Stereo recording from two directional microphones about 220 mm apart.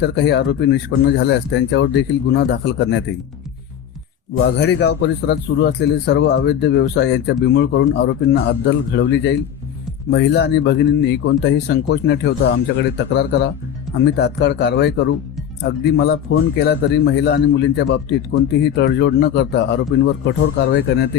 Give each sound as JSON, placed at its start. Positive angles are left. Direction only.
{"t": 0.0, "sound": "speech", "side_deg": 50}
{"t": 4.4, "sound": "speech", "side_deg": 50}